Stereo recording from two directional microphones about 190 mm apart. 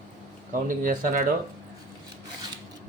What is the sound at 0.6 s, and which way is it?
Speech, 45° right (ahead or behind).